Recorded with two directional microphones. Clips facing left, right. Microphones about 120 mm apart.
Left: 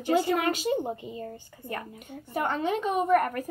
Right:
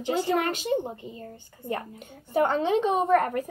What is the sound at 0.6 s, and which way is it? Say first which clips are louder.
Speech: even; 10° left (ahead or behind).